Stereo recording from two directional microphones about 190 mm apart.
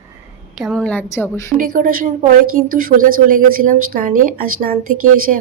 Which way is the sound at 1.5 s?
45° right (ahead or behind).